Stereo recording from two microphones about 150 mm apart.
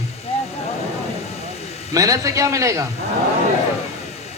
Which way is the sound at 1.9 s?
20° right (ahead or behind).